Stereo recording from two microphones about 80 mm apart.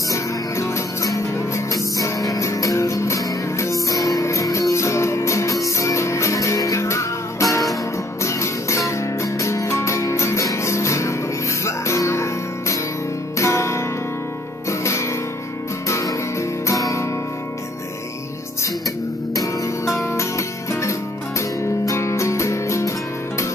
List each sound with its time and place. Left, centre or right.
0.1 s music: left
19.3 s music: left